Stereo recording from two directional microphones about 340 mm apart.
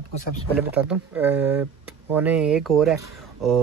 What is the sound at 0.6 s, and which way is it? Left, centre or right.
Speech, centre.